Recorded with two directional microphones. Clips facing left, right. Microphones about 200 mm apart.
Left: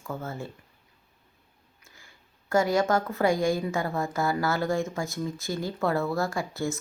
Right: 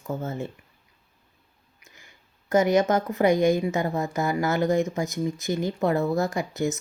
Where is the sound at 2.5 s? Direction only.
20° right (ahead or behind).